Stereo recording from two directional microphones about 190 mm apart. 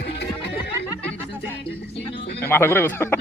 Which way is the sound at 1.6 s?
60° left (ahead or behind).